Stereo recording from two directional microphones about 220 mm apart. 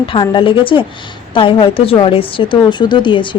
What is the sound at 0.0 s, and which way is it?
Speech, 20° left (ahead or behind).